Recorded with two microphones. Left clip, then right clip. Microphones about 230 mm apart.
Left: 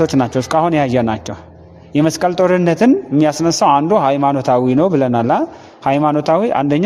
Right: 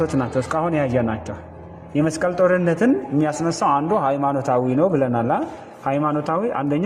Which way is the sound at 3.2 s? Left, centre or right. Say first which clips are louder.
Left 8 dB; left.